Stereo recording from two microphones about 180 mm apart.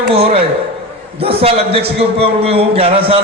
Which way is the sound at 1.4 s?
35° right (ahead or behind).